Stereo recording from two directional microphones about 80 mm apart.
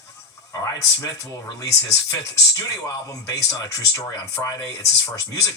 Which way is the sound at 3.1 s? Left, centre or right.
Left.